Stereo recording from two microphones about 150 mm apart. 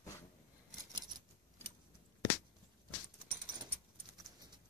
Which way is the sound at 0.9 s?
30° right (ahead or behind).